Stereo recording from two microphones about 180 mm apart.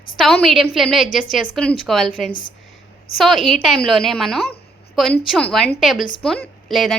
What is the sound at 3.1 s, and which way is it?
A woman's voice, centre (ahead or behind).